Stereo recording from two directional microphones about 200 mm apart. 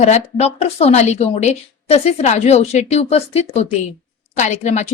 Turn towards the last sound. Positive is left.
turn(degrees=35)  # may be behind; listen again after turning